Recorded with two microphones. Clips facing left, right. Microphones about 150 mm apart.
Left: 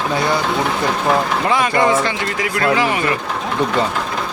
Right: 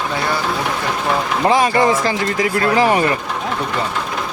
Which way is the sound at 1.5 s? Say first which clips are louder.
Right 3 dB; 35° right (ahead or behind).